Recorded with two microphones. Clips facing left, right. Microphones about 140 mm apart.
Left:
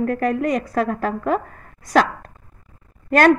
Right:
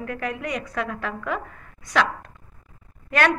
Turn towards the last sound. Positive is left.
turn(degrees=40)  # may be behind; listen again after turning